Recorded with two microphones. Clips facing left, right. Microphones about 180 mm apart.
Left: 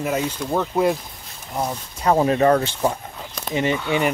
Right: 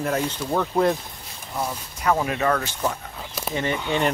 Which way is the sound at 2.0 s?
30° left (ahead or behind).